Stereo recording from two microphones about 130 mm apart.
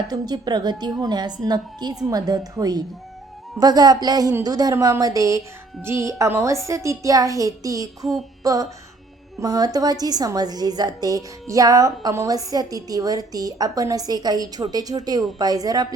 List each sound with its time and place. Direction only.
0.1 s a woman's voice: 30° right (ahead or behind)